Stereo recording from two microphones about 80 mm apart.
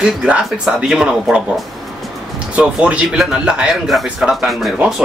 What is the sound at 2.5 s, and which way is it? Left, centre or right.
Speech, centre.